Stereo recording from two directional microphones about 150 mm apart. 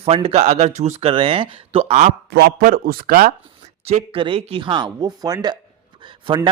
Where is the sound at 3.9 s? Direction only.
40° right (ahead or behind).